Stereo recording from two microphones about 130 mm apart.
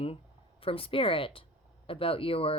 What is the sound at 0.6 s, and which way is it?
A woman's voice, 45° left (ahead or behind).